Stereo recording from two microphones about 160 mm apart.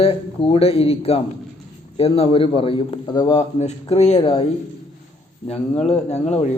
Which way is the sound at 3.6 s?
40° left (ahead or behind).